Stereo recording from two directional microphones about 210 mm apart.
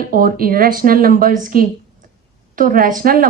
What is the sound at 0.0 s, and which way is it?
Speech, 40° right (ahead or behind).